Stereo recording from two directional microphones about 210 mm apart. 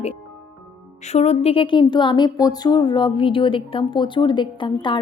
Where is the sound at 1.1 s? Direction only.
30° left (ahead or behind).